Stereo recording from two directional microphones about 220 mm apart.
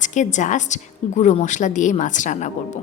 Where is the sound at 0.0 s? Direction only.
35° left (ahead or behind).